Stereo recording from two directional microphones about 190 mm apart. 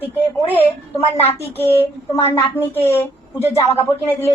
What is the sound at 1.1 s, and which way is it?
Speech, 35° left (ahead or behind).